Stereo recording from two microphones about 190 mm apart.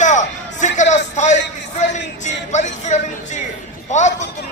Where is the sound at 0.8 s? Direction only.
40° left (ahead or behind).